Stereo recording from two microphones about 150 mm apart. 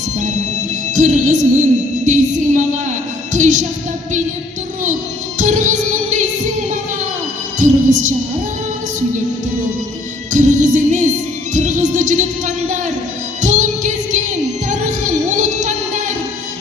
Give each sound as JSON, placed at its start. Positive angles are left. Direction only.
{"t": 0.9, "sound": "music", "side_deg": -60}
{"t": 5.4, "sound": "music", "side_deg": -55}
{"t": 7.6, "sound": "music", "side_deg": -60}
{"t": 10.3, "sound": "music", "side_deg": -60}